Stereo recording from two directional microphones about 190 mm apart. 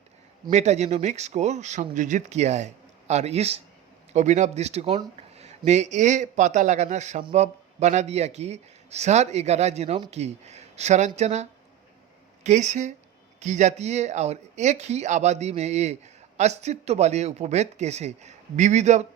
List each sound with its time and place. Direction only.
0.5 s speech: 35° right (ahead or behind)